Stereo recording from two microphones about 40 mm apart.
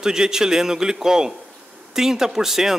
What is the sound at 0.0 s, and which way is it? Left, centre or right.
A man's voice, centre.